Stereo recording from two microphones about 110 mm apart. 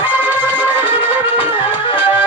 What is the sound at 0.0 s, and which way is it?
Music, 15° right (ahead or behind).